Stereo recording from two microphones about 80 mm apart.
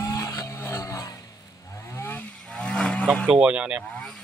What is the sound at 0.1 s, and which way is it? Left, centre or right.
Music, left.